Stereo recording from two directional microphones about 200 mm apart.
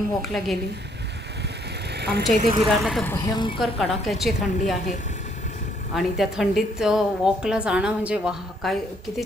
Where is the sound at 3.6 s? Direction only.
Centre (ahead or behind).